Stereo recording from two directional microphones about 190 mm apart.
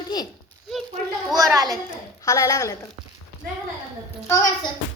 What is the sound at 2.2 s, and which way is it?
Speech, 20° left (ahead or behind).